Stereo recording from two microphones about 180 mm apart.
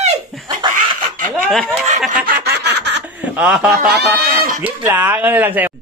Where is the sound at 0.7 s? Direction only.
50° right (ahead or behind).